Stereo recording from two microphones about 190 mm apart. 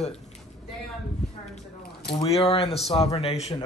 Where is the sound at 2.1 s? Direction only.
30° left (ahead or behind).